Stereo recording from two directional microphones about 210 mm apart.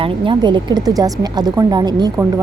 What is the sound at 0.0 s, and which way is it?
A woman's voice, 25° right (ahead or behind).